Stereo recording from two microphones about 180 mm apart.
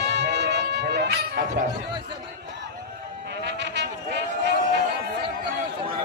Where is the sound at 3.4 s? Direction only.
70° right (ahead or behind).